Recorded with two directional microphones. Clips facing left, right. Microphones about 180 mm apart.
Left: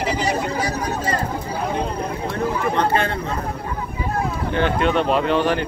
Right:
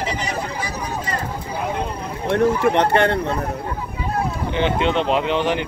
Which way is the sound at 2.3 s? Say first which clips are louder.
Right 7 dB; 70° right (ahead or behind).